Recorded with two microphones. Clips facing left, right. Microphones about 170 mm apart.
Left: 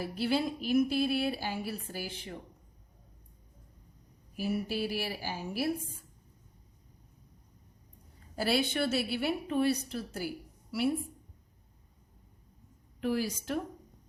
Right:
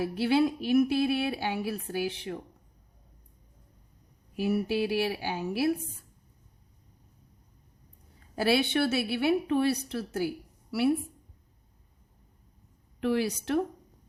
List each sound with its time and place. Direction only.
0.0 s a woman's voice: 65° right (ahead or behind)
4.4 s a woman's voice: 65° right (ahead or behind)
8.4 s a woman's voice: 70° right (ahead or behind)
13.0 s a woman's voice: 70° right (ahead or behind)